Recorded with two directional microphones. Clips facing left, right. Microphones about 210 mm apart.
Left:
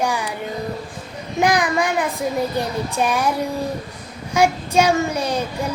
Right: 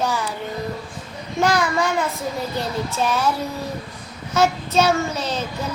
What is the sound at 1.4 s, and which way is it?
Child singing, 15° left (ahead or behind).